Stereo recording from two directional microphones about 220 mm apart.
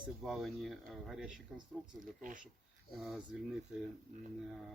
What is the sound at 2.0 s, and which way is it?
Speech, 35° right (ahead or behind).